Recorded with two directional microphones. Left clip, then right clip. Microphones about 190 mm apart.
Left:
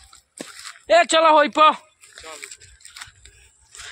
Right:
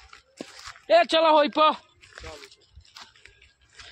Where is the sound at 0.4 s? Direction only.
25° left (ahead or behind).